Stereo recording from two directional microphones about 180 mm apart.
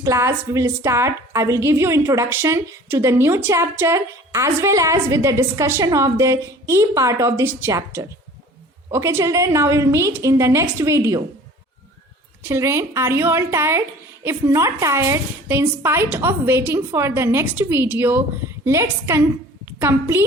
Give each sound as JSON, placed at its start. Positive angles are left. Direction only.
{"t": 0.0, "sound": "a woman's voice", "side_deg": -15}
{"t": 12.4, "sound": "a woman's voice", "side_deg": -15}